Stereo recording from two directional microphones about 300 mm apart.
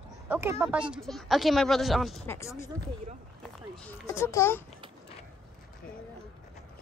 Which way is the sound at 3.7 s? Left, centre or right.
Centre.